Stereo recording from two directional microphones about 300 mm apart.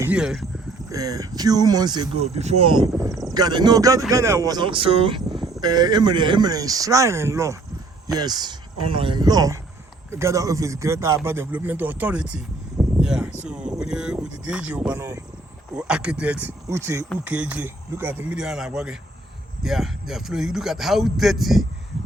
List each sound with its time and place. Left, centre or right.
0.0 s a man's voice: centre